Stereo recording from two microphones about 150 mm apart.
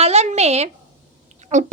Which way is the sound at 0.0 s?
45° right (ahead or behind).